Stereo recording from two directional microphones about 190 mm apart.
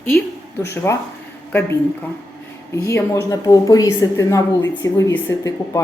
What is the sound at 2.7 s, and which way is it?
A woman's voice, 15° left (ahead or behind).